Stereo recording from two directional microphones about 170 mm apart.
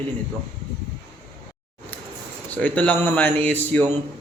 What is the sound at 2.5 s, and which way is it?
Speech, 10° left (ahead or behind).